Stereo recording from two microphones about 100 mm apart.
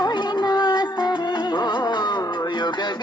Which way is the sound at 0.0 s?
45° left (ahead or behind).